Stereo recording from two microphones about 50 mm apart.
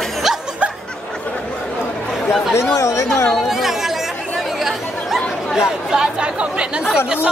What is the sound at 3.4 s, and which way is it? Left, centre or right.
Chatter, centre.